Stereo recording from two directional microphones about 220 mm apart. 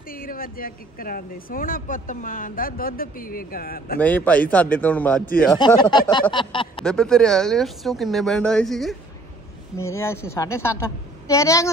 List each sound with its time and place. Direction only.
0.1 s speech: 40° left (ahead or behind)
4.0 s a woman's voice: 5° left (ahead or behind)
5.6 s speech: 20° left (ahead or behind)
6.8 s speech: 5° left (ahead or behind)
9.8 s a woman's voice: 10° left (ahead or behind)